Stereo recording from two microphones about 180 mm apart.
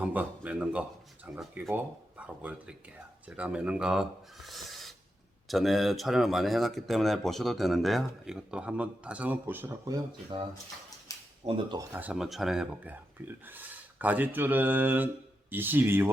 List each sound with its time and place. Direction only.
0.0 s speech: 10° right (ahead or behind)
4.4 s owl: centre (ahead or behind)
5.5 s speech: centre (ahead or behind); by 10.4 s 25° right (ahead or behind)
11.1 s a sound: 20° left (ahead or behind)
11.4 s speech: 30° right (ahead or behind)
11.8 s speech: 10° right (ahead or behind)